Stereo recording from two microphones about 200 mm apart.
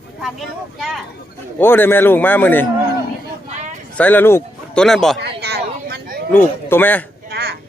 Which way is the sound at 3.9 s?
10° left (ahead or behind).